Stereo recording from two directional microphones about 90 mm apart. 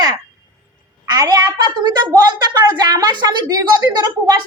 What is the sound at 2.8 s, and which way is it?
A woman's voice, 50° right (ahead or behind).